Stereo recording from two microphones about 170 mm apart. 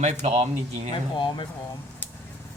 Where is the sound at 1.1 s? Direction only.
30° left (ahead or behind).